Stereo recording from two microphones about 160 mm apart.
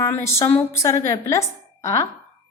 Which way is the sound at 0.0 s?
20° left (ahead or behind).